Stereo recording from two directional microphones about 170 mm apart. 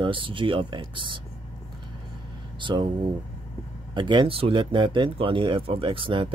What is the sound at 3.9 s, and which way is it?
Speech, 30° right (ahead or behind).